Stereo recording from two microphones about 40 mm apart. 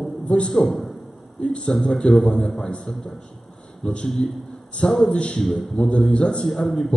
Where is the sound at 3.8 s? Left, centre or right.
Centre.